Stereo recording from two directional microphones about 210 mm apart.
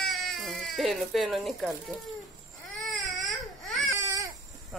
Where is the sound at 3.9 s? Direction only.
15° right (ahead or behind).